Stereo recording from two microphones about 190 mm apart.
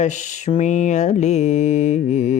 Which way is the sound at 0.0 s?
40° left (ahead or behind).